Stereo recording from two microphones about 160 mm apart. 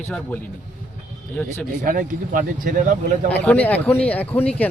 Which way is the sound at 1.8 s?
60° right (ahead or behind).